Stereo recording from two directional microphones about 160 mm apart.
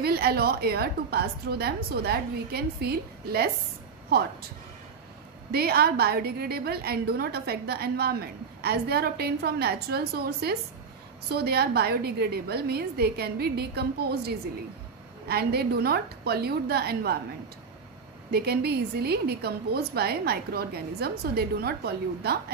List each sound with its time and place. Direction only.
0.0 s a woman's voice: 75° right (ahead or behind)
5.5 s a woman's voice: 75° right (ahead or behind)
18.3 s a woman's voice: 85° right